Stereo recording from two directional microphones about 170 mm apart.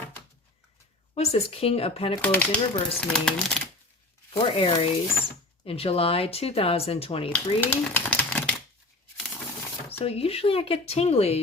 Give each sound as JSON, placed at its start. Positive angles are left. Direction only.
{"t": 1.1, "sound": "speech", "side_deg": 40}
{"t": 2.2, "sound": "speech", "side_deg": 10}
{"t": 4.4, "sound": "speech", "side_deg": 30}
{"t": 7.3, "sound": "speech", "side_deg": 10}
{"t": 10.0, "sound": "speech", "side_deg": 35}